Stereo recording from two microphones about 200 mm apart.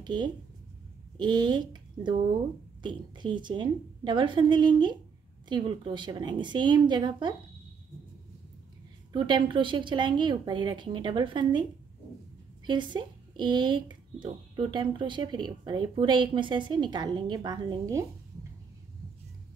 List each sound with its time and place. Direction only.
0.0 s a woman's voice: 20° right (ahead or behind)
9.1 s speech: 25° right (ahead or behind)
12.6 s speech: 20° right (ahead or behind)